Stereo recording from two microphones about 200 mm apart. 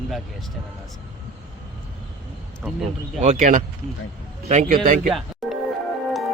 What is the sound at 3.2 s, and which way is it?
A man's voice, 35° right (ahead or behind).